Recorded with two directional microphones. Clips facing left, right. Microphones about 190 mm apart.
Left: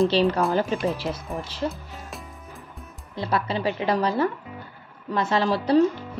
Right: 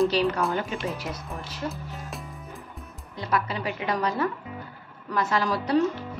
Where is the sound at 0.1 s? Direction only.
30° left (ahead or behind).